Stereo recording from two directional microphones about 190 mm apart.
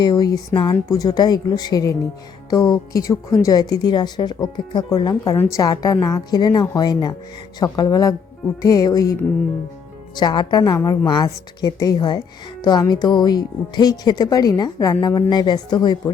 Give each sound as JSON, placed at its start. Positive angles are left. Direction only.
{"t": 0.0, "sound": "speech", "side_deg": 20}
{"t": 10.2, "sound": "speech", "side_deg": 20}